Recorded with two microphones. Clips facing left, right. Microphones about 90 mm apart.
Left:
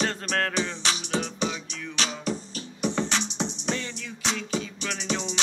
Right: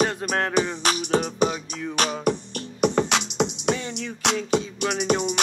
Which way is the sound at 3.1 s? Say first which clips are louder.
Right 5 dB; 70° right (ahead or behind).